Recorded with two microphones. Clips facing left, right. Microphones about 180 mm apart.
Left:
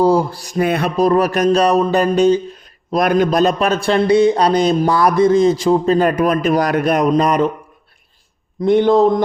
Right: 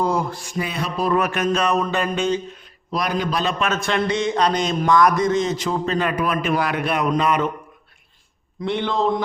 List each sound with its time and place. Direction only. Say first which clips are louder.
0.0 s a man's voice: left 8 dB; 30° left (ahead or behind)
0.6 s a sound: left 10 dB; 55° left (ahead or behind)
0.9 s a man's voice: left 5 dB; 40° left (ahead or behind)
2.9 s a man's voice: left 9 dB; 50° left (ahead or behind)
8.6 s speech: left 10 dB; 40° left (ahead or behind)